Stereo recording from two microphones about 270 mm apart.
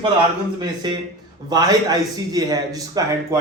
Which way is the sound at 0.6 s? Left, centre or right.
Centre.